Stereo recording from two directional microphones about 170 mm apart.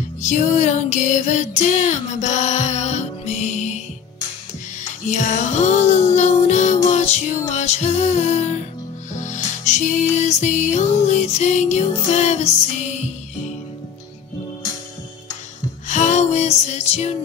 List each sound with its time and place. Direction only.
0.2 s music: 45° left (ahead or behind)
4.8 s music: 45° left (ahead or behind)
15.9 s music: 45° left (ahead or behind)